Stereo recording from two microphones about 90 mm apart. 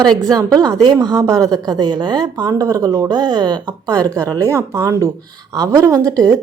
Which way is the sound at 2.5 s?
35° right (ahead or behind).